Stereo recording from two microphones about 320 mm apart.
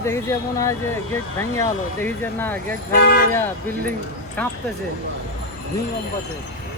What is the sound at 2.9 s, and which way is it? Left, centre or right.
Speech, left.